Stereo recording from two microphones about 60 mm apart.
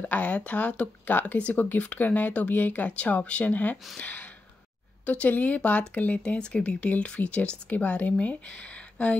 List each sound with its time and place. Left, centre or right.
0.0 s speech: left
4.0 s a sound: left
5.0 s speech: left